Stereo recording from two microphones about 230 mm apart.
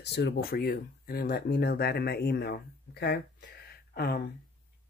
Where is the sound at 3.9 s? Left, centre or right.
Left.